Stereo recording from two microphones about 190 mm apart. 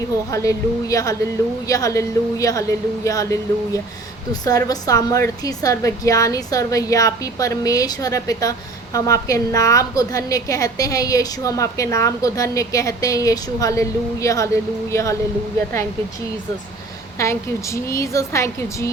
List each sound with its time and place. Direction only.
0.3 s a woman's voice: 15° left (ahead or behind)
17.2 s a woman's voice: 15° left (ahead or behind)